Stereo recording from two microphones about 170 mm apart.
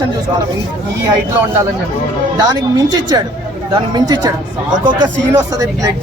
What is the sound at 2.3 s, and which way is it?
Speech, 25° right (ahead or behind).